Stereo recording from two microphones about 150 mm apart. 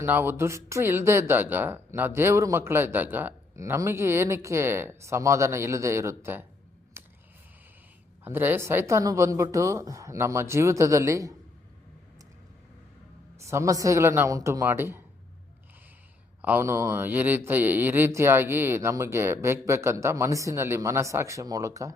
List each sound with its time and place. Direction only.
0.0 s speech: 15° right (ahead or behind)
7.0 s a sound: 15° right (ahead or behind)
8.2 s a woman's voice: 15° right (ahead or behind)
13.4 s a woman's voice: 20° right (ahead or behind)
16.4 s speech: 15° right (ahead or behind)